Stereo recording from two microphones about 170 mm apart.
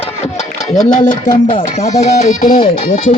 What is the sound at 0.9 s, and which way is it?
Music, 50° left (ahead or behind).